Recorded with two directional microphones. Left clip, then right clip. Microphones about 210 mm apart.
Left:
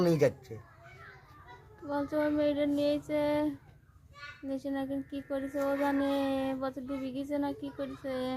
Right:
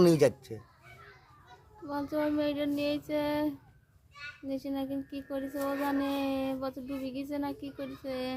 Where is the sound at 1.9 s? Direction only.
10° right (ahead or behind).